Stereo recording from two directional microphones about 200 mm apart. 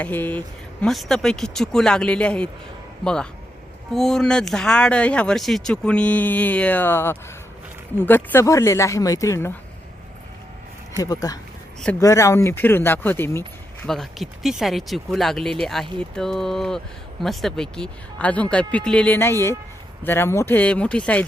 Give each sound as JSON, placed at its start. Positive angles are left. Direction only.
{"t": 0.0, "sound": "speech", "side_deg": 10}
{"t": 11.0, "sound": "speech", "side_deg": 20}